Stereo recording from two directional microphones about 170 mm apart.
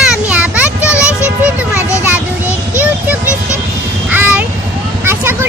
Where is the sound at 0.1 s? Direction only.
5° right (ahead or behind).